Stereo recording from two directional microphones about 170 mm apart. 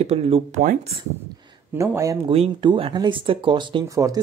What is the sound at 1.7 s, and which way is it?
Speech, 15° right (ahead or behind).